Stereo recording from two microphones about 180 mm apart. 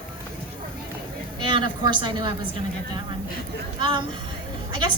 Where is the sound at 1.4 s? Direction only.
25° right (ahead or behind).